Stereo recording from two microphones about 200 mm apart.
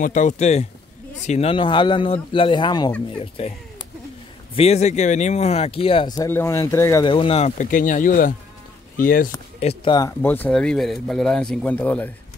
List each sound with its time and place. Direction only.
0.0 s speech: 40° left (ahead or behind); by 7.1 s 15° left (ahead or behind)
7.1 s speech: 25° left (ahead or behind); by 9.3 s 45° left (ahead or behind)
9.6 s speech: 30° left (ahead or behind)
9.9 s speech: 15° left (ahead or behind)